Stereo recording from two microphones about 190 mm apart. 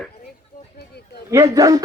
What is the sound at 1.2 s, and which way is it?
Speech, 15° right (ahead or behind).